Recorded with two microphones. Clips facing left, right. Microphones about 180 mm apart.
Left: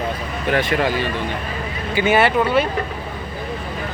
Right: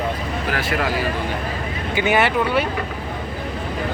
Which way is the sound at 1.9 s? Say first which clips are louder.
Left 2 dB; 15° right (ahead or behind).